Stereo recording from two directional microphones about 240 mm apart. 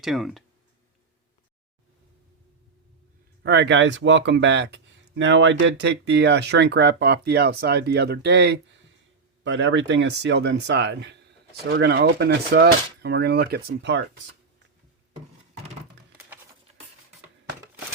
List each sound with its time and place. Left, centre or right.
0.0 s speech: centre
3.4 s speech: right